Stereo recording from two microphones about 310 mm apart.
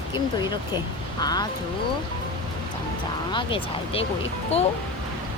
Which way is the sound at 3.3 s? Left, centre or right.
Centre.